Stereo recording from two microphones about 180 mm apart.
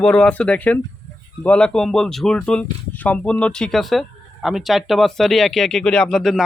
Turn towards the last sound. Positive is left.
turn(degrees=0)  # may be behind; listen again after turning